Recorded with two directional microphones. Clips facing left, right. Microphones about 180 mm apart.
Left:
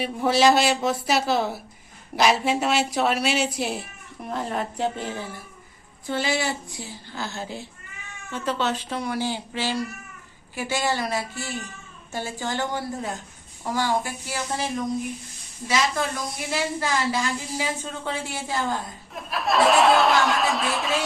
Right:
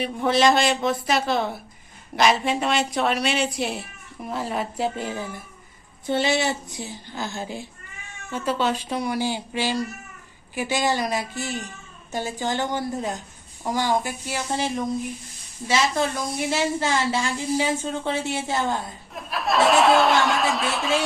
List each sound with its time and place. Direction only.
0.0 s speech: 5° left (ahead or behind); by 5.4 s 15° right (ahead or behind)
6.1 s speech: 25° right (ahead or behind)
15.6 s speech: 30° right (ahead or behind)
19.1 s speech: centre (ahead or behind)